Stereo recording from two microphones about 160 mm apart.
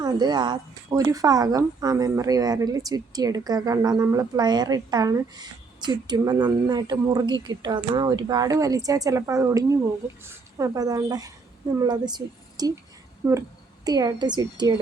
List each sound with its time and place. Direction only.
0.0 s a woman's voice: 25° right (ahead or behind)
13.8 s speech: 25° right (ahead or behind)